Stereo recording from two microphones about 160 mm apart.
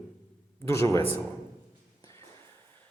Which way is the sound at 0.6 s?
20° left (ahead or behind).